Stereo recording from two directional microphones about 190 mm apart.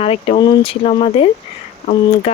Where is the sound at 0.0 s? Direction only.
30° left (ahead or behind).